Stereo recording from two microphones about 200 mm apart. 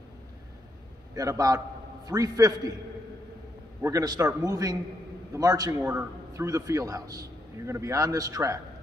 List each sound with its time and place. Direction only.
1.1 s a man's voice: 15° right (ahead or behind)
3.8 s a man's voice: 20° right (ahead or behind)